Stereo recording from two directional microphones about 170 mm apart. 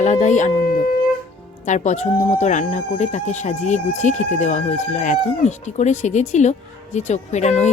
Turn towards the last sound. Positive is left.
turn(degrees=40)  # may be behind; listen again after turning